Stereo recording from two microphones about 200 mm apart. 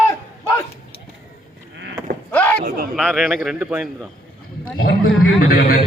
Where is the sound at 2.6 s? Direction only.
50° right (ahead or behind).